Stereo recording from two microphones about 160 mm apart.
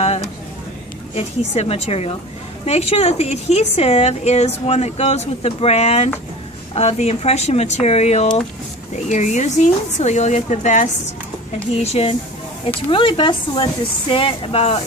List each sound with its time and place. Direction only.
1.1 s a woman's voice: 40° left (ahead or behind)